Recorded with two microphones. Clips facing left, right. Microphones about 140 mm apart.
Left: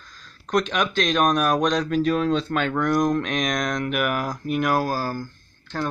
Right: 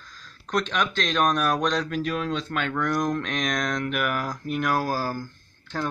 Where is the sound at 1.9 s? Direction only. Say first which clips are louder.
Left 6 dB; 35° left (ahead or behind).